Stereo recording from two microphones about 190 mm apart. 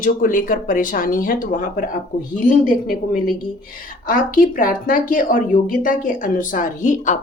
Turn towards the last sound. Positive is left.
turn(degrees=40)  # may be behind; listen again after turning